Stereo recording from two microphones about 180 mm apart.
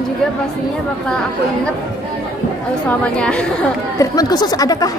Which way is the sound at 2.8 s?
5° left (ahead or behind).